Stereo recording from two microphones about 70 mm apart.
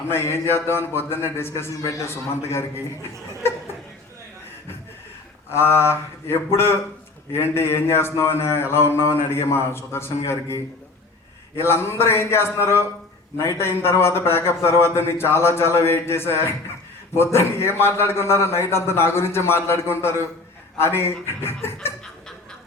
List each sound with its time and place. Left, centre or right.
0.1 s a man's voice: left
5.5 s a man's voice: left